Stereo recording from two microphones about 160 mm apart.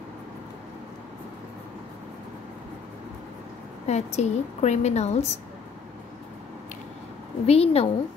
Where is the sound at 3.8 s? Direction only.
45° left (ahead or behind).